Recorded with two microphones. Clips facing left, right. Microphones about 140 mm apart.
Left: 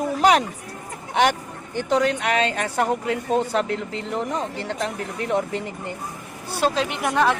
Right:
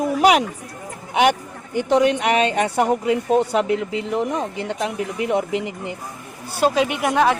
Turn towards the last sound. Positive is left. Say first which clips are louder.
# right 3 dB
turn(degrees=-5)  # may be behind; listen again after turning